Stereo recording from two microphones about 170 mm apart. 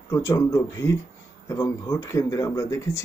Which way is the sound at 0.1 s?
15° left (ahead or behind).